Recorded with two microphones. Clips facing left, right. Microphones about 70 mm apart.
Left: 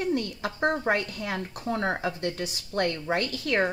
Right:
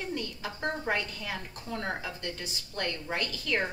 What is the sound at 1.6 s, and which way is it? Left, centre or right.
Speech, left.